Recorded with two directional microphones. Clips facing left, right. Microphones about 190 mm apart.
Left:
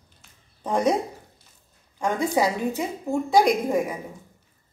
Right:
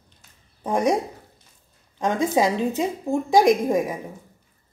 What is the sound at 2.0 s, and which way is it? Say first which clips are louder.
A woman's voice: right 2 dB; 20° right (ahead or behind).